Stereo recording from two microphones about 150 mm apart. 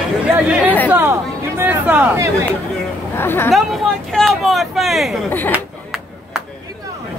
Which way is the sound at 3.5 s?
Centre (ahead or behind).